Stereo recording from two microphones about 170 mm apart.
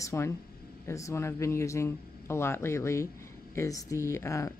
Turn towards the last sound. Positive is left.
turn(degrees=15)  # may be behind; listen again after turning